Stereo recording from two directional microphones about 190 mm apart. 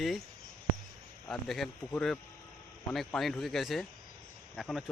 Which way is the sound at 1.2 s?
Centre (ahead or behind).